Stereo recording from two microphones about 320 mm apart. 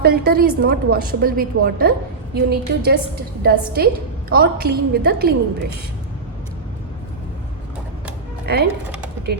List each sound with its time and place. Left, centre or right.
0.0 s a woman's voice: right
8.5 s speech: right